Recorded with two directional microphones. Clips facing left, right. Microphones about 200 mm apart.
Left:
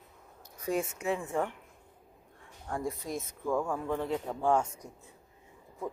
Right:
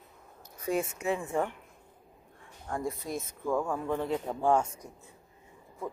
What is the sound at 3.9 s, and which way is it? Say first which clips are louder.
Speech: right 1 dB; 15° right (ahead or behind).